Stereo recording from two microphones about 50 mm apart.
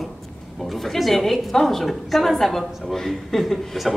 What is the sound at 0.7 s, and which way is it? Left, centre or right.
A woman's voice, centre.